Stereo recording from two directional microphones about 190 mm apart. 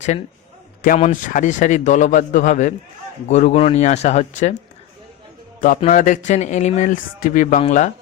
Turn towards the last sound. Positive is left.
turn(degrees=40)  # may be behind; listen again after turning